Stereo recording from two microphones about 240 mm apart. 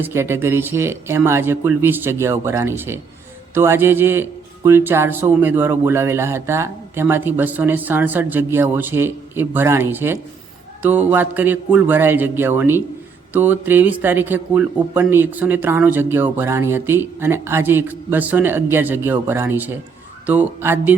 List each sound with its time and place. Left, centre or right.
0.0 s a man's voice: centre